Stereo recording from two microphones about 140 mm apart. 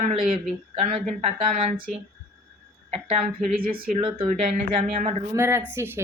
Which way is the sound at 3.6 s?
90° right.